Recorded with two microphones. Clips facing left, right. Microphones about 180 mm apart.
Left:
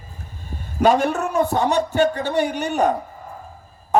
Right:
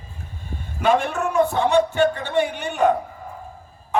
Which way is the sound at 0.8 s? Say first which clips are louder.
Left 2 dB; 40° left (ahead or behind).